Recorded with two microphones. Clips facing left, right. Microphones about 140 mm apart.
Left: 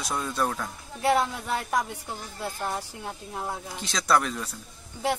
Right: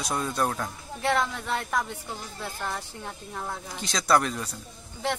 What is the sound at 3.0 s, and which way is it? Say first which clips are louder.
Speech: left 2 dB; 15° left (ahead or behind).